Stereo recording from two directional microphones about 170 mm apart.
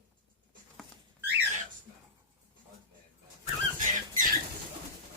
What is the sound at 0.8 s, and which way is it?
Patter, centre (ahead or behind).